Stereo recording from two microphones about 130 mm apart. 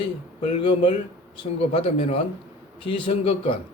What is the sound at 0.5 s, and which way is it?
A man's voice, 40° left (ahead or behind).